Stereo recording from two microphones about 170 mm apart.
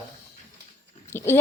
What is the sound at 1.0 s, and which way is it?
Speech, 15° left (ahead or behind).